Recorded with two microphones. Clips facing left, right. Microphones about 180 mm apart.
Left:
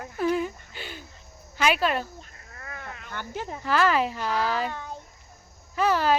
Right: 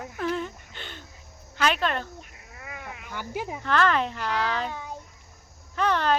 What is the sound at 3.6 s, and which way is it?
Speech, 5° left (ahead or behind).